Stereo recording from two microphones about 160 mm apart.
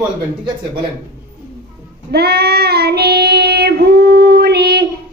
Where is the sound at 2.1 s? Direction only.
85° right.